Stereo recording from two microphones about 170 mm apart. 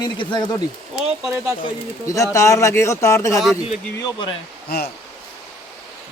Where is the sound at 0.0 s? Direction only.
25° left (ahead or behind).